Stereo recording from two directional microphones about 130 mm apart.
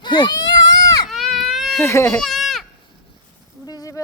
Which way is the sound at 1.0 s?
Centre (ahead or behind).